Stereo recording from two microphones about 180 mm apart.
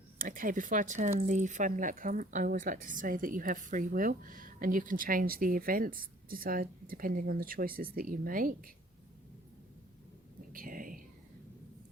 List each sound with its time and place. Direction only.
0.2 s speech: 50° right (ahead or behind)
10.5 s speech: 50° right (ahead or behind)